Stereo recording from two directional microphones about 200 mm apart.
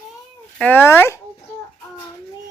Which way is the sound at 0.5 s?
10° left (ahead or behind).